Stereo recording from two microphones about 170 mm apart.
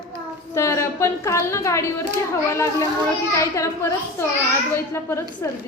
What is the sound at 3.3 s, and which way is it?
Speech, 15° left (ahead or behind).